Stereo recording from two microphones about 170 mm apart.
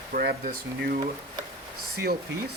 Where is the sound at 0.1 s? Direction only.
65° right (ahead or behind).